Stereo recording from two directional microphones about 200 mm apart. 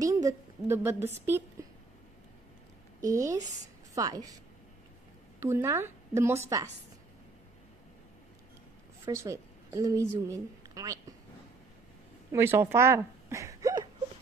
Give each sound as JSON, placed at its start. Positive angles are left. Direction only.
{"t": 0.0, "sound": "a sound", "side_deg": -15}
{"t": 1.2, "sound": "a woman's voice", "side_deg": -10}
{"t": 3.1, "sound": "a woman's voice", "side_deg": -15}
{"t": 5.4, "sound": "a woman's voice", "side_deg": -15}
{"t": 9.0, "sound": "a woman's voice", "side_deg": -15}
{"t": 12.3, "sound": "speech", "side_deg": -10}